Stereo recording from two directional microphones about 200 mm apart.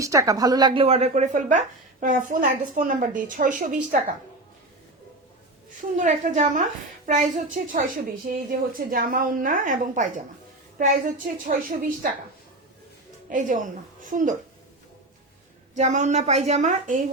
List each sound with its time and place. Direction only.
0.0 s a woman's voice: 15° right (ahead or behind); by 4.0 s 40° right (ahead or behind)
6.0 s a woman's voice: 40° right (ahead or behind)
13.3 s a woman's voice: 40° right (ahead or behind)
15.7 s a woman's voice: 35° right (ahead or behind)